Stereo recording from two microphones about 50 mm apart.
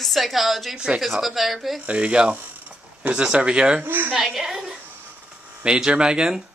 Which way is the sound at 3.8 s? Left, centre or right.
Right.